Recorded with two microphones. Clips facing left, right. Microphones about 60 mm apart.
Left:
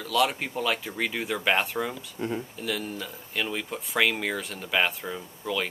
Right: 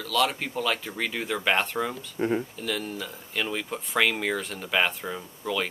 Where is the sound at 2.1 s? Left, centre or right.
Right.